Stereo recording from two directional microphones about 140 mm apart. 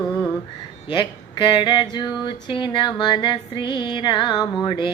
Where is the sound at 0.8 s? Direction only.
35° left (ahead or behind).